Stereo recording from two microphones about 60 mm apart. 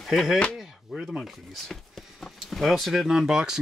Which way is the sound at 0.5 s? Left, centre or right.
Centre.